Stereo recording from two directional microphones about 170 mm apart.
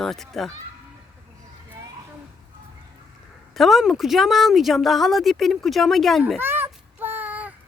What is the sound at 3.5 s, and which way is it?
Speech, centre (ahead or behind).